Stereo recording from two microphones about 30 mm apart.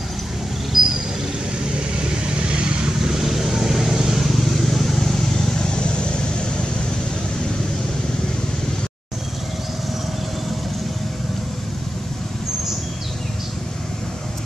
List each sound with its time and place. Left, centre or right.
0.7 s a sound: centre
1.7 s vehicle: right
3.0 s vehicle: centre
4.6 s vehicle: centre
5.6 s vehicle: left